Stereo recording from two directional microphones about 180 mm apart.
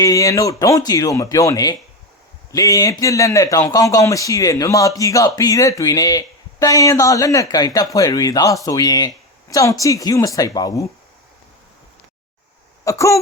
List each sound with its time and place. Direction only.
0.0 s speech: 20° left (ahead or behind)
12.8 s speech: 15° left (ahead or behind)